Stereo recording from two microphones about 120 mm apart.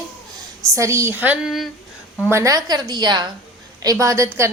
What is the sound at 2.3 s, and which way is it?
Speech, 30° right (ahead or behind).